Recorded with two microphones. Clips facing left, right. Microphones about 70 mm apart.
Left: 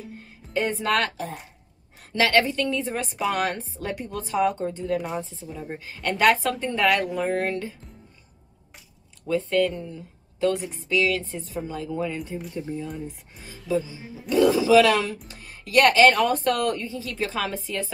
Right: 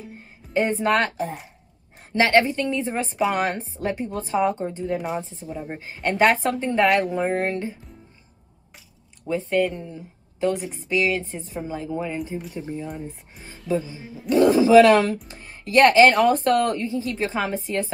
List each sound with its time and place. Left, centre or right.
0.5 s speech: right
9.3 s speech: centre
13.7 s speech: right